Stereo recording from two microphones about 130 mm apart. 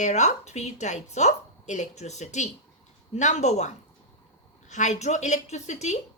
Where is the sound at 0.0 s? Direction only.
65° left (ahead or behind).